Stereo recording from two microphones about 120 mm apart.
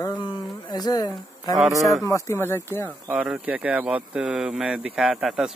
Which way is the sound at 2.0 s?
25° left (ahead or behind).